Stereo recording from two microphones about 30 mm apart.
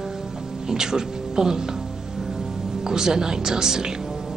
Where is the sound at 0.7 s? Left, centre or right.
Right.